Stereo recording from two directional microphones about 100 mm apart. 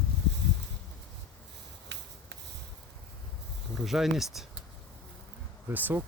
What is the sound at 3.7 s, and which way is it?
Speech, centre (ahead or behind).